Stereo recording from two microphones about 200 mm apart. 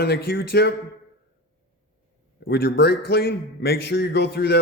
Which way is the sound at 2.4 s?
50° left (ahead or behind).